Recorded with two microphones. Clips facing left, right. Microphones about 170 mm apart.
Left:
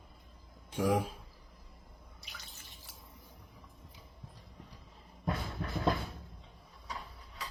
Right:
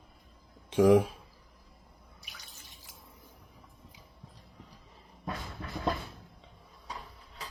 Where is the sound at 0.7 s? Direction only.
90° right.